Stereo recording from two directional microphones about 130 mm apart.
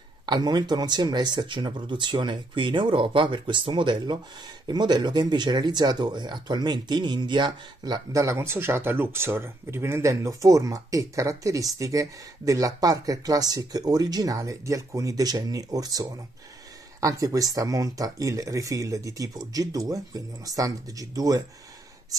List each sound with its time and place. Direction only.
0.3 s speech: 35° right (ahead or behind)